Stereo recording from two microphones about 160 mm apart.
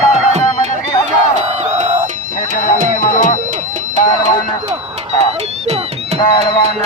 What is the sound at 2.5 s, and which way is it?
Music, 50° left (ahead or behind).